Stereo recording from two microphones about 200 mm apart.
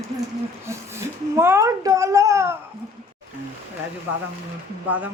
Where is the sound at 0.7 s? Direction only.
15° right (ahead or behind).